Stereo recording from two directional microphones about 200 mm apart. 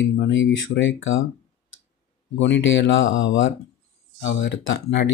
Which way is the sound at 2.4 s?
65° left (ahead or behind).